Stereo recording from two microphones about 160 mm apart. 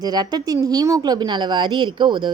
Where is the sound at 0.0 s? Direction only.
25° right (ahead or behind).